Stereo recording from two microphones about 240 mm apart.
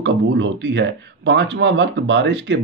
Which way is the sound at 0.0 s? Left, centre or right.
Right.